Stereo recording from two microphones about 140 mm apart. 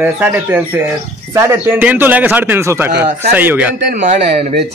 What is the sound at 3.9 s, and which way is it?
Speech, 60° right (ahead or behind).